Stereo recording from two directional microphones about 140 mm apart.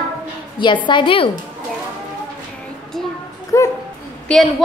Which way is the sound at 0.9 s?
35° left (ahead or behind).